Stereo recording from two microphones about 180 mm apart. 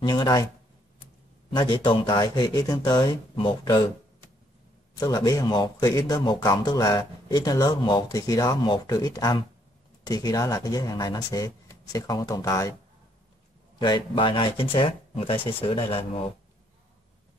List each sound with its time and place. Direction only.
0.0 s speech: 25° left (ahead or behind)
1.5 s speech: 25° left (ahead or behind)
4.9 s speech: 20° left (ahead or behind)
13.7 s speech: 25° left (ahead or behind)